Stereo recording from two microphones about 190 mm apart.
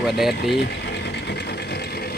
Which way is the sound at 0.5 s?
60° left (ahead or behind).